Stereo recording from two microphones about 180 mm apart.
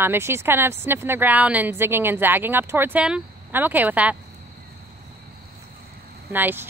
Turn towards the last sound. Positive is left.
turn(degrees=-10)  # may be behind; listen again after turning